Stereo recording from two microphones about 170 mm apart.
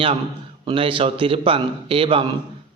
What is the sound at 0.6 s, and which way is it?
A man's voice, 30° right (ahead or behind).